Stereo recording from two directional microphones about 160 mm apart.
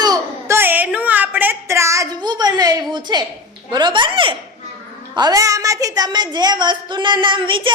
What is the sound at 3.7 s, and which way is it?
A woman's voice, 30° right (ahead or behind).